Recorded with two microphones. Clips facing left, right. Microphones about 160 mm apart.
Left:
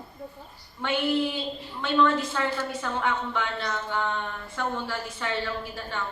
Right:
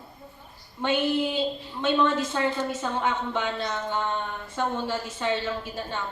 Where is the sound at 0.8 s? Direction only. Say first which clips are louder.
Right 1 dB; 20° right (ahead or behind).